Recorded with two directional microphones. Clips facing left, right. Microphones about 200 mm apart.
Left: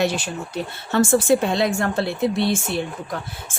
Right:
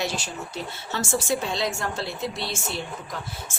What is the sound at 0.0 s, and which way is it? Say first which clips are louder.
A woman's voice: left 7 dB; 60° left (ahead or behind).